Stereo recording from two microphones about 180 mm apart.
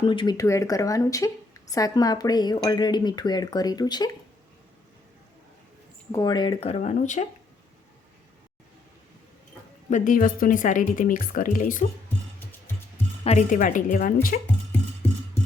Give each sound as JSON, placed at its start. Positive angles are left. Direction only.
{"t": 0.0, "sound": "speech", "side_deg": 25}
{"t": 6.1, "sound": "speech", "side_deg": 20}
{"t": 9.9, "sound": "speech", "side_deg": 45}
{"t": 12.0, "sound": "music", "side_deg": 10}
{"t": 13.2, "sound": "speech", "side_deg": 40}